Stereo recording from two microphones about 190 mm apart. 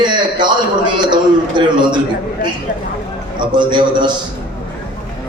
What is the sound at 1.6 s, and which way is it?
Speech, 25° right (ahead or behind).